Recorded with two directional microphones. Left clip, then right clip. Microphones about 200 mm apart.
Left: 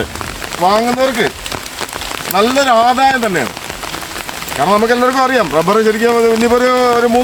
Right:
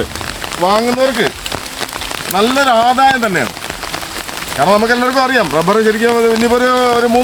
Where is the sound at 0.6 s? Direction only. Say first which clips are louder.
Left 1 dB; 30° left (ahead or behind).